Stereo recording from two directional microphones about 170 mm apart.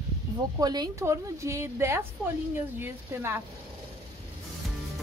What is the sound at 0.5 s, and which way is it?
A woman's voice, 25° right (ahead or behind).